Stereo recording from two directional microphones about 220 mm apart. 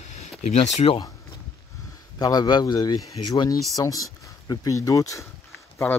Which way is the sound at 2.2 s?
20° left (ahead or behind).